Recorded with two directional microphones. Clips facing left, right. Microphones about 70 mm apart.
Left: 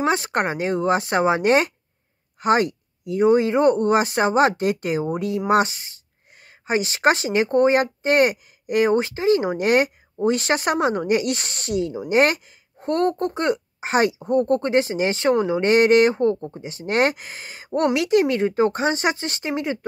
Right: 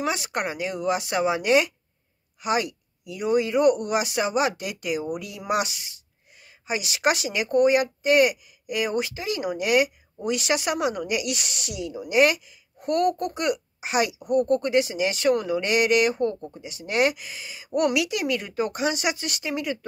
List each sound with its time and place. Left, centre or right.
0.0 s speech: left
17.6 s speech: left